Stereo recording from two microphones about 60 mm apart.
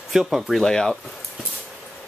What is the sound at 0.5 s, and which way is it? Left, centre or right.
Speech, centre.